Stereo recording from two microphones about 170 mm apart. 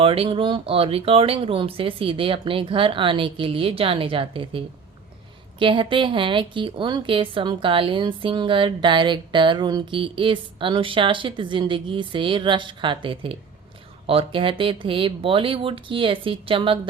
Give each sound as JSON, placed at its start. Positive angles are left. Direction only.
{"t": 0.0, "sound": "a woman's voice", "side_deg": -35}